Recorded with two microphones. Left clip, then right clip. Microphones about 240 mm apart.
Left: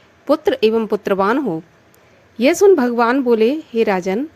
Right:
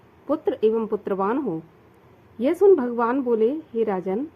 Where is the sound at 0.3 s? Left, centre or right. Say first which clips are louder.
Left 7 dB; left.